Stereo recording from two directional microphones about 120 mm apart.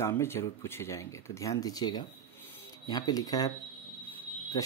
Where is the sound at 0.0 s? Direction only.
20° left (ahead or behind).